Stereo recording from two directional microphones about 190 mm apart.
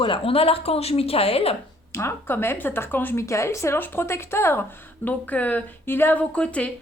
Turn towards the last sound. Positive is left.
turn(degrees=5)  # may be behind; listen again after turning